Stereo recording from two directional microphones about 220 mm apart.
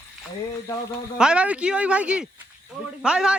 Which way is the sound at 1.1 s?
5° right (ahead or behind).